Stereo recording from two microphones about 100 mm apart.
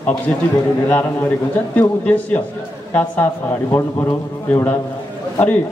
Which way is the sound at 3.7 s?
20° left (ahead or behind).